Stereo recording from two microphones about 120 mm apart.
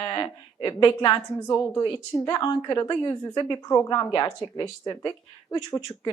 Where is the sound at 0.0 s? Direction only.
25° left (ahead or behind).